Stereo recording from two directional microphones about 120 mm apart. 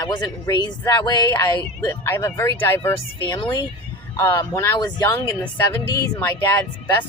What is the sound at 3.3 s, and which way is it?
Speech, 35° left (ahead or behind).